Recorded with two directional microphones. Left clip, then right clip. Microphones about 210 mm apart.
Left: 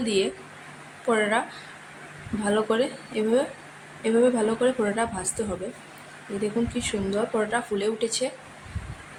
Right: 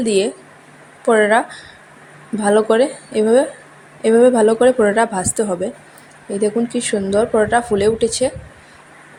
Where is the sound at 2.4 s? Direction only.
30° right (ahead or behind).